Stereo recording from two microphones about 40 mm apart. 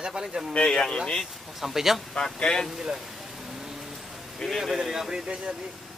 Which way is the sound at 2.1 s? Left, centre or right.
Centre.